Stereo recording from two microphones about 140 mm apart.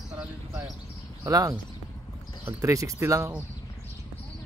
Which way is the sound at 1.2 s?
25° right (ahead or behind).